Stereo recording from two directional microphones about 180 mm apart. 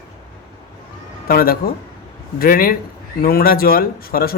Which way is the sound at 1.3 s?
55° left (ahead or behind).